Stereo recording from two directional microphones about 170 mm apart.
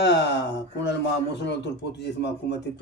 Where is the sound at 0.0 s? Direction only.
90° left.